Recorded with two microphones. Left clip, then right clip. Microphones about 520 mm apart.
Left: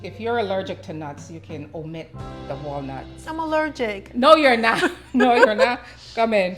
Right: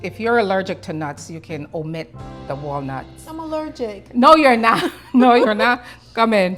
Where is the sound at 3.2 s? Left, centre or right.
Centre.